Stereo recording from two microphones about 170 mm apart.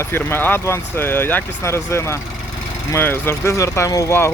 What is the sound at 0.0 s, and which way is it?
Speech, 15° left (ahead or behind).